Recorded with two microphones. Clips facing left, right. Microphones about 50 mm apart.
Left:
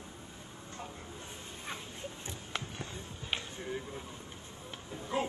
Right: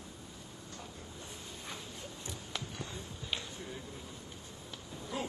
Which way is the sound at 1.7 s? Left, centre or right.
Left.